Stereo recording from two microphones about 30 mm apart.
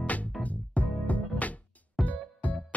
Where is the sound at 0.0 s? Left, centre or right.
Left.